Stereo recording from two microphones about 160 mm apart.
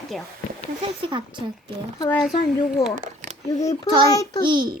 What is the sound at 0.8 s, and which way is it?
Speech, 30° right (ahead or behind).